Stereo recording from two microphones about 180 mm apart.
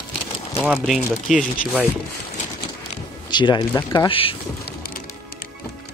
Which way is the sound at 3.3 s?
25° left (ahead or behind).